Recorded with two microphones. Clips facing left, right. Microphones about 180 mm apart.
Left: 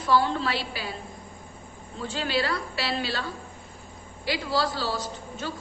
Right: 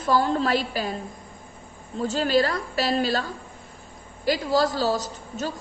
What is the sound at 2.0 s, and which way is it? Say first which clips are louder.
A woman's voice: right 7 dB; 40° right (ahead or behind).